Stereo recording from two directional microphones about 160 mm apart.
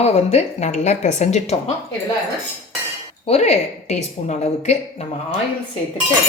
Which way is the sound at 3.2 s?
45° left (ahead or behind).